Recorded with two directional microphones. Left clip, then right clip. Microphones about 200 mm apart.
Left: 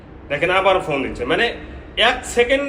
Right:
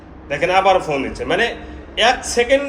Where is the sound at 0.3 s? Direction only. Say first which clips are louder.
Right 2 dB; 5° right (ahead or behind).